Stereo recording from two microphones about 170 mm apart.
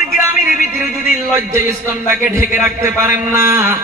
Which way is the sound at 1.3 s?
15° right (ahead or behind).